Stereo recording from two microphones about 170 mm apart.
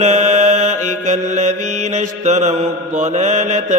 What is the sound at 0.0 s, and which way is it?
Mantra, 45° right (ahead or behind).